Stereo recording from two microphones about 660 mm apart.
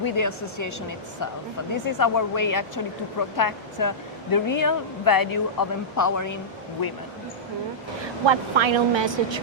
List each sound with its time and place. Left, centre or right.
0.0 s speech: left
8.3 s speech: right